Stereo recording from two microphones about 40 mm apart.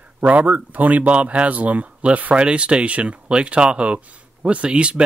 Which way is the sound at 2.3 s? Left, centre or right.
Right.